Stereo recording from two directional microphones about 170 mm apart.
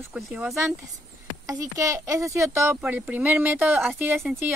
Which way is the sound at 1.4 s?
20° right (ahead or behind).